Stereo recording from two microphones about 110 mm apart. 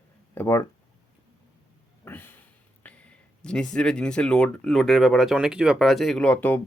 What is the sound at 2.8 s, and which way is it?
Speech, 10° left (ahead or behind).